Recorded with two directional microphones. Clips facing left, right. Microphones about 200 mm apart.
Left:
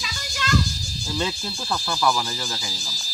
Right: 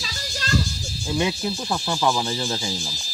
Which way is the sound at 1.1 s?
15° right (ahead or behind).